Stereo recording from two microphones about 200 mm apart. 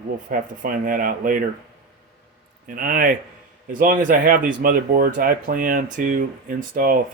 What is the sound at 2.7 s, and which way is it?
Speech, 45° right (ahead or behind).